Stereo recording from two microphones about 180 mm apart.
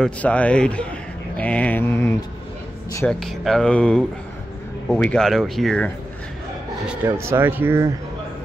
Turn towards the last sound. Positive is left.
turn(degrees=-10)  # may be behind; listen again after turning